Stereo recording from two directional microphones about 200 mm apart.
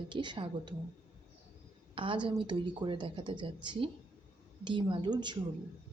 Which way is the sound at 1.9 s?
25° right (ahead or behind).